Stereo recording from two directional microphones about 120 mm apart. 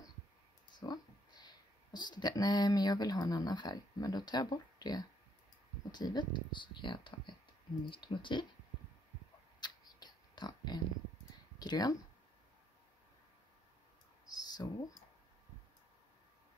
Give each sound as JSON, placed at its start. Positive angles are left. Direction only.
{"t": 0.7, "sound": "speech", "side_deg": 35}
{"t": 9.6, "sound": "mouse", "side_deg": 35}
{"t": 11.5, "sound": "speech", "side_deg": 35}
{"t": 14.2, "sound": "a sound", "side_deg": 35}